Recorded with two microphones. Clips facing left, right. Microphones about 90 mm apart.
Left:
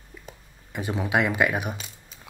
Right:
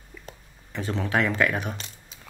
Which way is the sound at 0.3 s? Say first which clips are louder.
Even; 10° left (ahead or behind).